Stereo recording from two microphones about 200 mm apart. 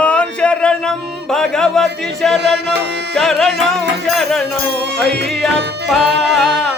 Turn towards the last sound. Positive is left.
turn(degrees=0)  # may be behind; listen again after turning